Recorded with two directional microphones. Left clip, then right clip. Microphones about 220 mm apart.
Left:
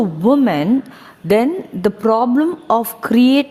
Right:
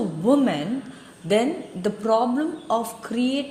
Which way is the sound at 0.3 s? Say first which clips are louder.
Left 6 dB; 45° left (ahead or behind).